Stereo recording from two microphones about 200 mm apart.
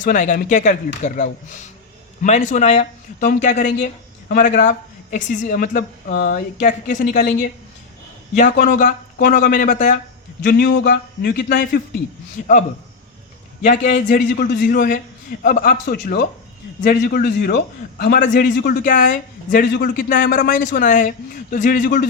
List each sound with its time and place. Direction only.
0.0 s a woman's voice: 40° left (ahead or behind)
10.4 s a man's voice: 55° left (ahead or behind)
13.6 s a woman's voice: 40° left (ahead or behind)
14.3 s speech: 65° left (ahead or behind)
14.6 s a man's voice: 45° left (ahead or behind); by 18.8 s 60° left (ahead or behind)
18.9 s a man's voice: 40° left (ahead or behind)